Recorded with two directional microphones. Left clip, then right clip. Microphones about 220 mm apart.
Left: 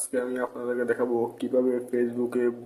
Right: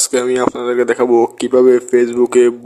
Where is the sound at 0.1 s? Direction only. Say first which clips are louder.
Right 11 dB; 45° right (ahead or behind).